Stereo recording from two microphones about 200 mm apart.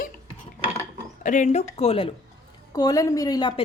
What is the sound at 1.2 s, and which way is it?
Speech, 40° left (ahead or behind).